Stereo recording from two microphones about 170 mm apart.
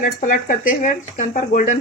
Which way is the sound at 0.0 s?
50° left (ahead or behind).